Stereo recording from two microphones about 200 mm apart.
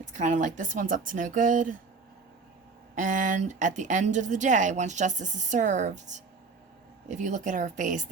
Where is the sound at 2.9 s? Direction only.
40° right (ahead or behind).